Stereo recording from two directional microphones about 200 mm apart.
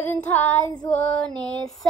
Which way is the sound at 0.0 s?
10° left (ahead or behind).